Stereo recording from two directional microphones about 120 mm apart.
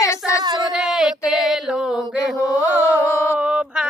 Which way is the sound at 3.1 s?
20° left (ahead or behind).